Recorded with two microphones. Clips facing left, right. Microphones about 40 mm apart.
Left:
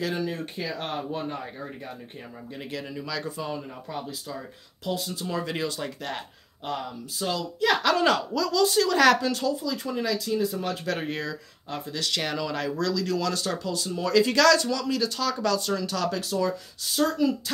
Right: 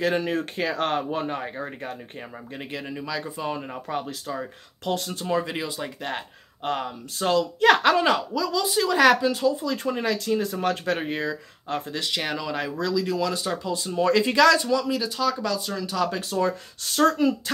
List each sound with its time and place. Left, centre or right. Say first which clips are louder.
0.0 s speech: right 5 dB; right
0.3 s speech: right 6 dB; right
1.4 s speech: right 5 dB; right
2.5 s speech: right 1 dB; right
3.4 s speech: right 4 dB; right
5.2 s speech: right 5 dB; right
5.5 s speech: even; centre
6.6 s speech: right 4 dB; right
7.8 s speech: right 2 dB; right
9.6 s speech: right 3 dB; right
11.0 s speech: right 3 dB; right
14.3 s speech: right 4 dB; right
16.2 s speech: right 2 dB; right